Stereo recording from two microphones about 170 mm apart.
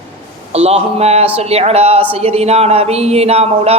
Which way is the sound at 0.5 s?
40° right (ahead or behind).